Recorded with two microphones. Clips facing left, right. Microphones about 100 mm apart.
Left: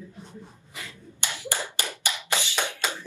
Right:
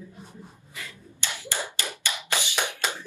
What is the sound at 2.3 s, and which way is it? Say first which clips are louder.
Tap: even; 15° right (ahead or behind).